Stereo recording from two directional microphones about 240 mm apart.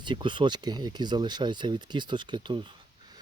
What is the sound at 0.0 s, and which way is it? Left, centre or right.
Speech, centre.